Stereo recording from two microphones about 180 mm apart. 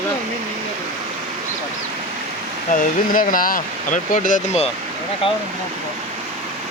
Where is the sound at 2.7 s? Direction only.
50° left (ahead or behind).